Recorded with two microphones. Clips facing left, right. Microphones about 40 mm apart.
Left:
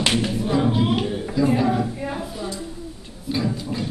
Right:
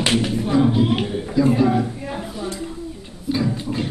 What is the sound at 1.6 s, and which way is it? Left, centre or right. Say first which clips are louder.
Speech: right 3 dB; centre.